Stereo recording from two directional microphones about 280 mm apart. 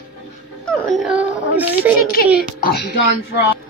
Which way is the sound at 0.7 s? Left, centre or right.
Centre.